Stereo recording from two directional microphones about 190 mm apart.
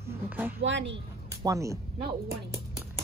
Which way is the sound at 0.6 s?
70° right (ahead or behind).